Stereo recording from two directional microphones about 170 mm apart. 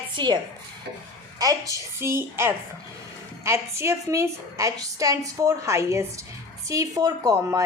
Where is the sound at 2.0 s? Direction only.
15° right (ahead or behind).